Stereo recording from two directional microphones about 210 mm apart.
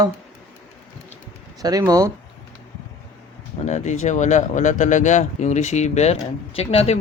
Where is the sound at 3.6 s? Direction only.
35° left (ahead or behind).